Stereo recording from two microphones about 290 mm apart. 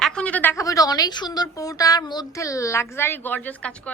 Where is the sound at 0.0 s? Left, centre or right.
Centre.